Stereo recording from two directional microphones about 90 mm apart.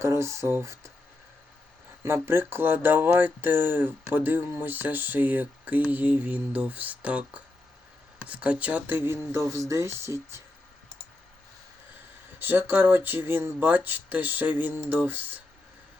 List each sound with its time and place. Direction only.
0.0 s speech: 30° right (ahead or behind)
2.0 s speech: 25° right (ahead or behind)
12.4 s speech: 25° right (ahead or behind)